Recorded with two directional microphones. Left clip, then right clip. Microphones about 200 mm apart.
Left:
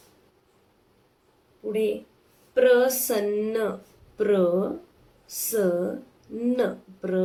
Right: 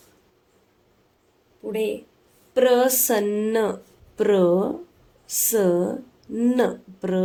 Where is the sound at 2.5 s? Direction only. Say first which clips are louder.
Right 1 dB; 60° right (ahead or behind).